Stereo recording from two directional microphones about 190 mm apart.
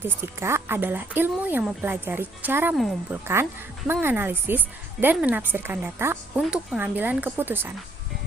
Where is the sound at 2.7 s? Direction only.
Centre (ahead or behind).